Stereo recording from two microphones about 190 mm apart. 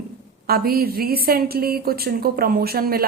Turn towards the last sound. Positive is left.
turn(degrees=-50)  # may be behind; listen again after turning